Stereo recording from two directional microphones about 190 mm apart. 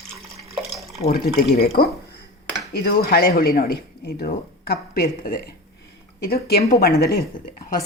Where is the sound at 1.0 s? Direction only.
55° left (ahead or behind).